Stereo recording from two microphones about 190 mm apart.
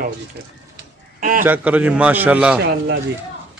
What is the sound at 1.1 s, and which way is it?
Speech, 45° right (ahead or behind).